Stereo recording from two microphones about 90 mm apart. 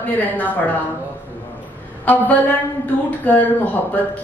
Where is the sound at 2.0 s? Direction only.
15° left (ahead or behind).